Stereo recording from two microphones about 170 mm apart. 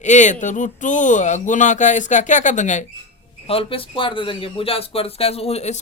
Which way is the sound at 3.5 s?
35° left (ahead or behind).